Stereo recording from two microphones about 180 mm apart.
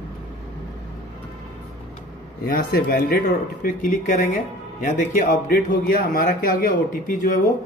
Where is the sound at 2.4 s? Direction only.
55° left (ahead or behind).